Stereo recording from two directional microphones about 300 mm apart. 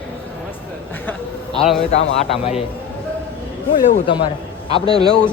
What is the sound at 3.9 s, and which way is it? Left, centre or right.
Speech, centre.